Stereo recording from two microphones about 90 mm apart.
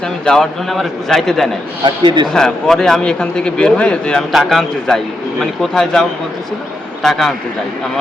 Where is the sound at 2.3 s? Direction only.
5° left (ahead or behind).